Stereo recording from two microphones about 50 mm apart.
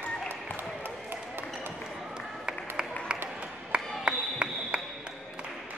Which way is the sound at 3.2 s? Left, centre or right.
Right.